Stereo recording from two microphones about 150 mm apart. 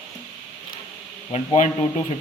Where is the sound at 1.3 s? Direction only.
50° left (ahead or behind).